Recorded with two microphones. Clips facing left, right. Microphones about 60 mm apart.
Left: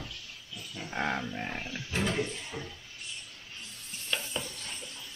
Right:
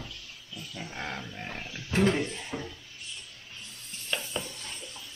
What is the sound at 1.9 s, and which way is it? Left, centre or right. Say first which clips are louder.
Speech: right 7 dB; right.